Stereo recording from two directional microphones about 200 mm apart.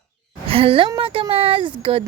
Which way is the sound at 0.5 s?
30° right (ahead or behind).